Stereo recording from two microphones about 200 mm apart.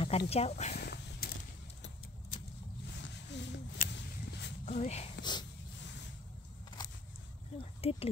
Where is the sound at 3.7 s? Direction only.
45° left (ahead or behind).